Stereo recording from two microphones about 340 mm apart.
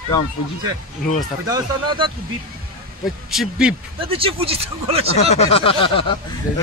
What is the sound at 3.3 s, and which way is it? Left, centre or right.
Music, centre.